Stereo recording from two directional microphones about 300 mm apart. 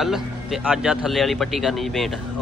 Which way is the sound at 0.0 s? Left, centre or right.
Centre.